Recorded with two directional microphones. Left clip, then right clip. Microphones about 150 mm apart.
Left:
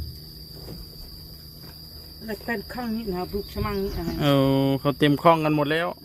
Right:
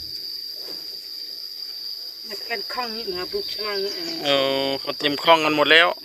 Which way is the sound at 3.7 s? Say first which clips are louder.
Right 3 dB; 20° left (ahead or behind).